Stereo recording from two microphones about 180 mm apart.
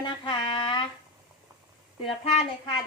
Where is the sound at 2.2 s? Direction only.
30° left (ahead or behind).